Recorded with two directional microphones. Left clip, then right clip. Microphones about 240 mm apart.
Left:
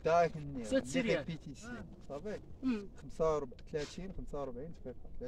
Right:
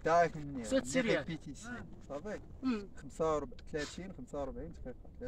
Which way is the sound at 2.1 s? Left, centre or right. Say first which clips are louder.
Right 1 dB; left.